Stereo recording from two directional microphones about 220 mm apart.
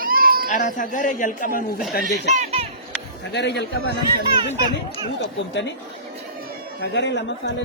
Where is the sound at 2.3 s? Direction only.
25° right (ahead or behind).